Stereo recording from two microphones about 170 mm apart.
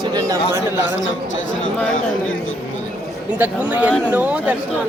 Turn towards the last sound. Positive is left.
turn(degrees=-10)  # may be behind; listen again after turning